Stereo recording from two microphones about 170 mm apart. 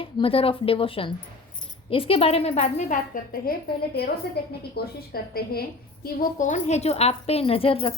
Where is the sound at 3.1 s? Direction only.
60° left (ahead or behind).